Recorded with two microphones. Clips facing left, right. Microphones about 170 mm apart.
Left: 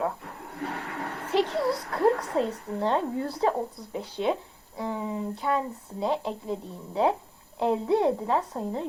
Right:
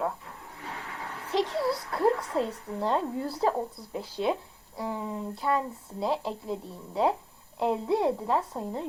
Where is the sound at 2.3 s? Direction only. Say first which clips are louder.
Left 2 dB; centre (ahead or behind).